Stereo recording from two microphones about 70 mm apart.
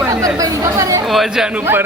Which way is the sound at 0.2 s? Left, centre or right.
Right.